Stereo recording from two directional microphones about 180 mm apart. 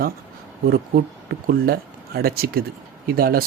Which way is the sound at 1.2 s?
55° right (ahead or behind).